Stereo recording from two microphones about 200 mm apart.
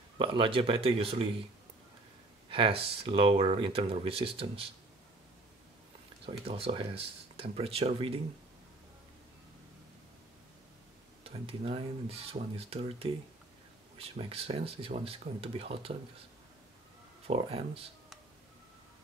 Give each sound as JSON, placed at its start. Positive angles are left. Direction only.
{"t": 0.2, "sound": "speech", "side_deg": -25}
{"t": 2.5, "sound": "speech", "side_deg": -25}
{"t": 6.2, "sound": "speech", "side_deg": -30}
{"t": 11.2, "sound": "speech", "side_deg": -30}
{"t": 17.3, "sound": "speech", "side_deg": -30}